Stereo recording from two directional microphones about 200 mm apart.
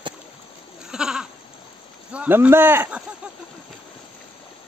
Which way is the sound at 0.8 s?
5° right (ahead or behind).